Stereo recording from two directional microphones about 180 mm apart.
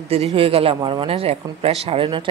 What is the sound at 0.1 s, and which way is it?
A man's voice, 35° right (ahead or behind).